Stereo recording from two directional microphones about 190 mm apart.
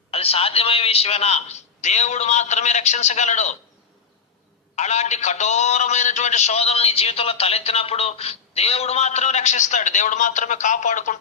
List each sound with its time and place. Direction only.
0.1 s a man's voice: 30° left (ahead or behind)
4.7 s a man's voice: 35° left (ahead or behind)